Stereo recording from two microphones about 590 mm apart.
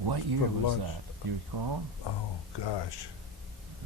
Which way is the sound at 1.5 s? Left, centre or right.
Right.